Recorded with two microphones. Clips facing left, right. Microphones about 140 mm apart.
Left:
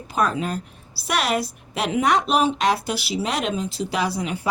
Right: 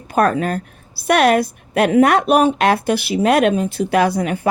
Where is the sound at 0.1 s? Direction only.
55° right (ahead or behind).